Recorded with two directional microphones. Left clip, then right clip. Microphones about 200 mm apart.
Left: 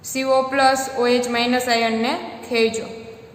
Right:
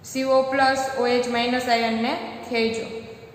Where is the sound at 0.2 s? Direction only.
45° left (ahead or behind).